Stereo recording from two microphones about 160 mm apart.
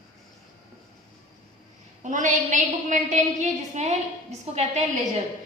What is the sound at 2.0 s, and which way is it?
A woman's voice, 50° right (ahead or behind).